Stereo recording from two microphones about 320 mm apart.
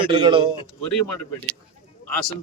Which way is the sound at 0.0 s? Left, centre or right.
Centre.